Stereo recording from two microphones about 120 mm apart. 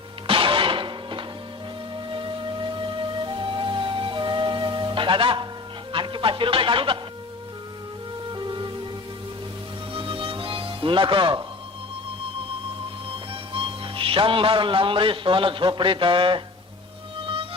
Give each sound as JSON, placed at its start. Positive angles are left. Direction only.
{"t": 0.3, "sound": "music", "side_deg": -45}
{"t": 5.9, "sound": "speech", "side_deg": -45}
{"t": 8.3, "sound": "music", "side_deg": -40}
{"t": 9.9, "sound": "music", "side_deg": -45}
{"t": 13.5, "sound": "a man's voice", "side_deg": -45}
{"t": 17.2, "sound": "music", "side_deg": -50}